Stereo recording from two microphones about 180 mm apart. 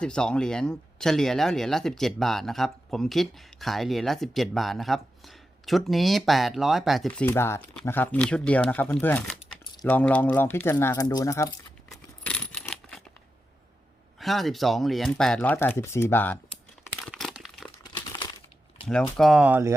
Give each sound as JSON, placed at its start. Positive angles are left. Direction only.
{"t": 0.0, "sound": "speech", "side_deg": 5}
{"t": 12.2, "sound": "coin", "side_deg": 5}
{"t": 14.2, "sound": "speech", "side_deg": 0}
{"t": 17.0, "sound": "crumpling", "side_deg": 0}
{"t": 17.9, "sound": "crumpling", "side_deg": 25}
{"t": 19.1, "sound": "speech", "side_deg": 0}